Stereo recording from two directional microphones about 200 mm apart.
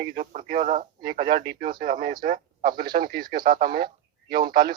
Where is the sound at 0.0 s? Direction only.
45° right (ahead or behind).